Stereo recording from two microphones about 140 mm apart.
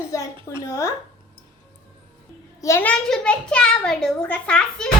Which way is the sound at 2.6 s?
20° left (ahead or behind).